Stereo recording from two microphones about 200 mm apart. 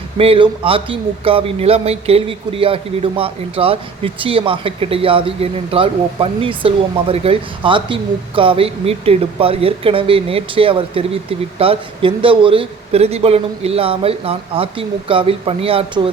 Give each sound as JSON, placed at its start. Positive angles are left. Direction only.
{"t": 0.2, "sound": "a man's voice", "side_deg": -25}